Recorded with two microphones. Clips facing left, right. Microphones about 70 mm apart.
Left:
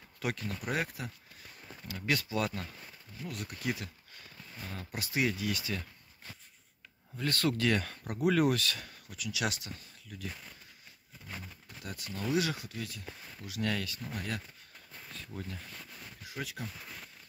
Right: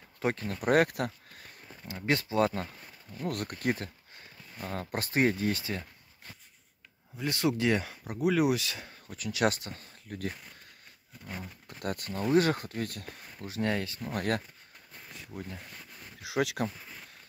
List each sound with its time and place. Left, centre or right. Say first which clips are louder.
0.2 s speech: right 5 dB; right
0.6 s speech: right 10 dB; right
1.7 s speech: right 3 dB; right
3.2 s speech: right 7 dB; right
7.2 s speech: right 2 dB; centre
7.9 s speech: right 1 dB; centre
9.0 s speech: right 7 dB; right
11.8 s speech: right 6 dB; right
13.4 s speech: right 4 dB; right
14.1 s speech: right 9 dB; right
15.0 s a sound: right 1 dB; centre
15.4 s speech: right 1 dB; right
16.2 s speech: right 12 dB; right
16.7 s a sound: even; centre